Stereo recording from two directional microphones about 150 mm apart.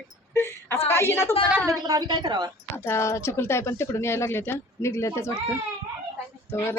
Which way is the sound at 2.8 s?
20° left (ahead or behind).